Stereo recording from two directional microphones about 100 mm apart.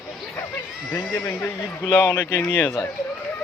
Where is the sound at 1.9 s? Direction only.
40° left (ahead or behind).